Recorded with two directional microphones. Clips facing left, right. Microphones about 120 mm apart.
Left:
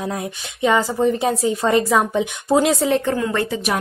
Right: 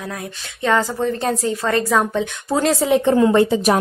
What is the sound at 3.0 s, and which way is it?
Speech, 25° right (ahead or behind).